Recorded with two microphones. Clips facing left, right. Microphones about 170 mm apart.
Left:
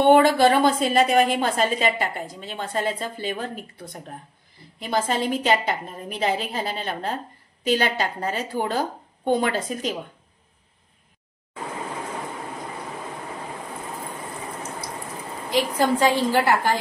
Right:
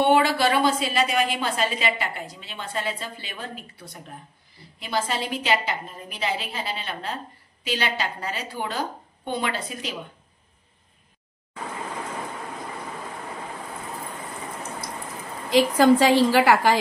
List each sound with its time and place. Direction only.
0.0 s a woman's voice: 50° left (ahead or behind)
15.5 s a woman's voice: 90° right